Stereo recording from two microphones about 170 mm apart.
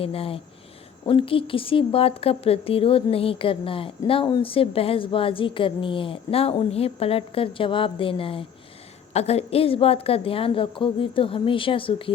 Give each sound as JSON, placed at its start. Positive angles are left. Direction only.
{"t": 0.0, "sound": "speech", "side_deg": 35}